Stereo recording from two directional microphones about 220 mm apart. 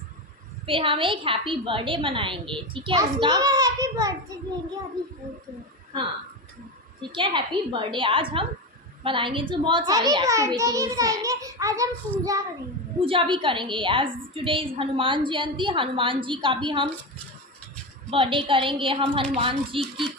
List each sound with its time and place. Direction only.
0.7 s a woman's voice: 25° right (ahead or behind)
5.9 s a woman's voice: 20° right (ahead or behind)
13.0 s a woman's voice: 25° right (ahead or behind)
18.1 s a woman's voice: 25° right (ahead or behind)